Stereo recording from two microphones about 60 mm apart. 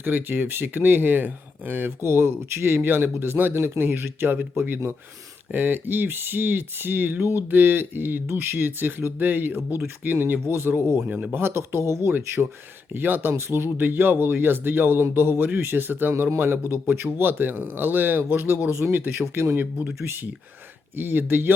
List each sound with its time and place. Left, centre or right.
0.0 s speech: right
2.0 s speech: right
5.5 s speech: right
11.0 s speech: right
11.3 s speech: right
11.5 s speech: right
12.1 s speech: right
13.3 s speech: right
17.2 s speech: right
20.9 s speech: right